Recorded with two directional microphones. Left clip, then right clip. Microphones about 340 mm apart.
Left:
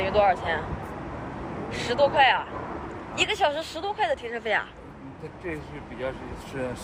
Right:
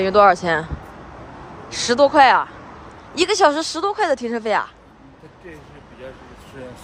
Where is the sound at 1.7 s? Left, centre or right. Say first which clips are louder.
Right 7 dB; right.